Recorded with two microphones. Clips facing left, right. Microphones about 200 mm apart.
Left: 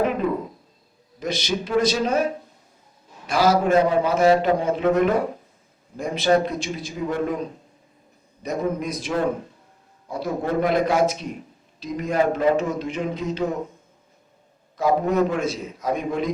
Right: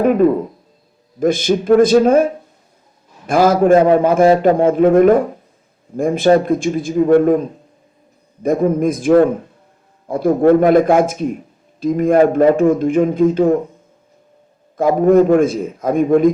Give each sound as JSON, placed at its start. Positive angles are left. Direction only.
{"t": 1.2, "sound": "a man's voice", "side_deg": -50}
{"t": 8.4, "sound": "a man's voice", "side_deg": -50}
{"t": 14.8, "sound": "a man's voice", "side_deg": -50}